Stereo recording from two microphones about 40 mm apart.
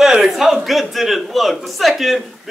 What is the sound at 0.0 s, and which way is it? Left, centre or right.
A man's voice, centre.